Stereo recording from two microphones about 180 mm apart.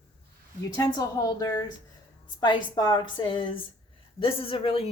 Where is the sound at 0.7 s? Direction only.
20° left (ahead or behind).